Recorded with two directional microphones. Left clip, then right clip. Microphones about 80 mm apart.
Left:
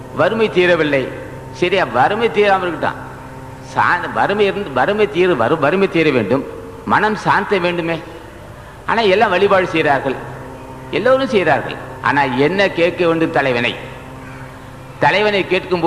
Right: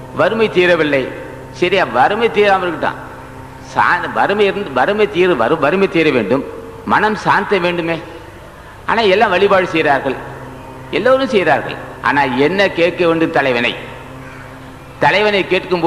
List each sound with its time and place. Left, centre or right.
0.2 s a man's voice: right
15.0 s a man's voice: right